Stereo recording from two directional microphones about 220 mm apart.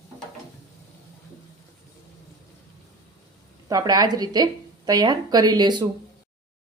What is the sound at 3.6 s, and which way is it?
Speech, 15° right (ahead or behind).